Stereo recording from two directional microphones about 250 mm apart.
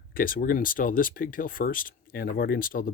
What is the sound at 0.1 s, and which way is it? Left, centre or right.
Speech, left.